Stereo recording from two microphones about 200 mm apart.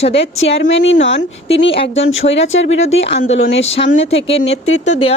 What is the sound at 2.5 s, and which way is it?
Speech, 70° left (ahead or behind).